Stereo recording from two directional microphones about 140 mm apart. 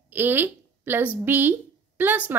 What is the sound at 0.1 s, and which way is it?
A woman's voice, 15° right (ahead or behind).